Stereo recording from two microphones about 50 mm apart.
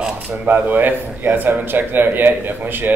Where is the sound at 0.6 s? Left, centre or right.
Right.